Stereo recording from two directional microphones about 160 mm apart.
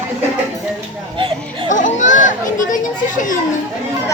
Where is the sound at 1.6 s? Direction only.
50° left (ahead or behind).